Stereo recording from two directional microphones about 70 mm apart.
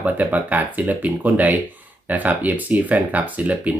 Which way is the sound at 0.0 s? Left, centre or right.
Right.